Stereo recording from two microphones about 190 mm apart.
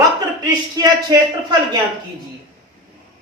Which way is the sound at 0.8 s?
20° right (ahead or behind).